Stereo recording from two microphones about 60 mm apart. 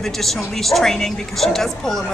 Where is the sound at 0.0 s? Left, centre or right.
Centre.